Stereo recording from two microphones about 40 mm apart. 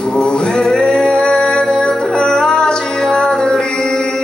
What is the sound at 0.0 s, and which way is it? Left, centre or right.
Music, centre.